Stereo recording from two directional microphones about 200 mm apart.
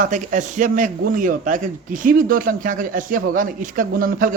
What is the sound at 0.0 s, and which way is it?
A man's voice, 40° right (ahead or behind).